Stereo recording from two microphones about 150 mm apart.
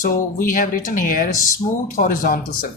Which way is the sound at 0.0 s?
65° left (ahead or behind).